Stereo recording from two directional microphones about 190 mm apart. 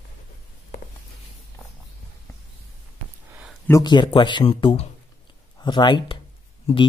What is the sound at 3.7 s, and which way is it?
Speech, 20° left (ahead or behind).